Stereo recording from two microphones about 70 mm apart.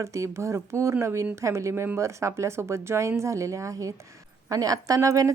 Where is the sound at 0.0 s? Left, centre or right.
Right.